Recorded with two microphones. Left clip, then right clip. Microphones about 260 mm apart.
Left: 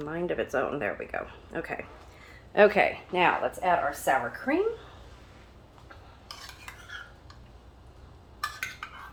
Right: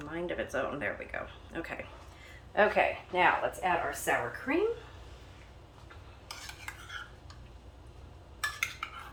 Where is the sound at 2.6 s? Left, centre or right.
Left.